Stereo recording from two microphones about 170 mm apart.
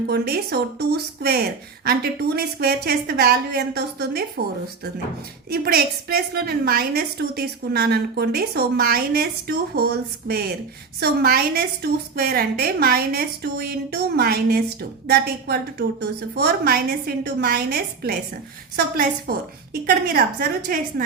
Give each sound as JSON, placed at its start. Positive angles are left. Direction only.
{"t": 0.1, "sound": "a woman's voice", "side_deg": -75}
{"t": 5.5, "sound": "a woman's voice", "side_deg": -65}
{"t": 19.3, "sound": "a woman's voice", "side_deg": -60}